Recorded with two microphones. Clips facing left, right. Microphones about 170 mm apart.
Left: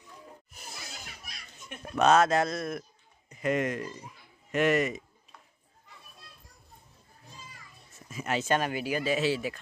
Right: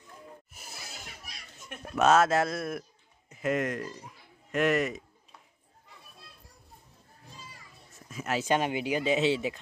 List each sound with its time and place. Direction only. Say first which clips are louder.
0.5 s cat: left 1 dB; 5° right (ahead or behind)
1.7 s speech: even; centre (ahead or behind)
8.1 s speech: even; centre (ahead or behind)
8.5 s speech: right 2 dB; 20° right (ahead or behind)